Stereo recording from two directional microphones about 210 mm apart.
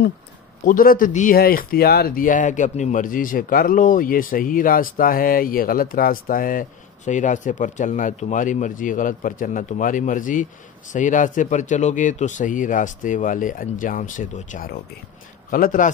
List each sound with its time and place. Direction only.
0.7 s speech: 40° left (ahead or behind)